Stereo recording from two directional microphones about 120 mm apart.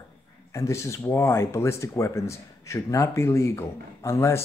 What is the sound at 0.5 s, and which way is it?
Speech, 25° left (ahead or behind).